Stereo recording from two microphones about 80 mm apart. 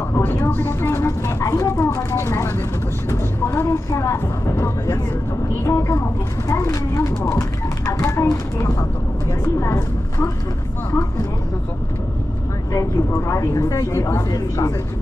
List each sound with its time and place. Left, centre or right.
0.1 s speech: left
5.7 s speech: left
12.7 s speech: left